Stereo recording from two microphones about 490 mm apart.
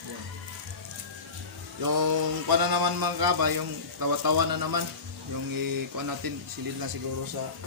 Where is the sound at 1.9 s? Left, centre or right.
Right.